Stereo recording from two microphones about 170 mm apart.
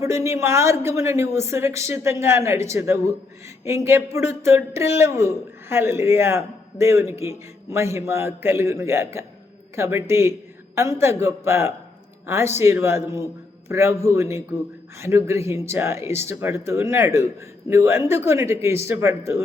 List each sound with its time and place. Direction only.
0.0 s speech: 15° right (ahead or behind)